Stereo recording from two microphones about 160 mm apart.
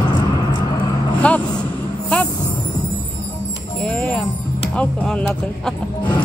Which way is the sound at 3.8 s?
10° left (ahead or behind).